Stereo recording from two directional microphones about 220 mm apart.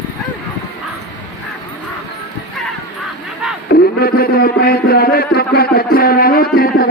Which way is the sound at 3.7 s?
45° left (ahead or behind).